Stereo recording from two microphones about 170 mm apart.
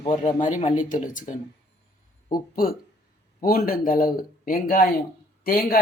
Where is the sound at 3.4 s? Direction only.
60° left (ahead or behind).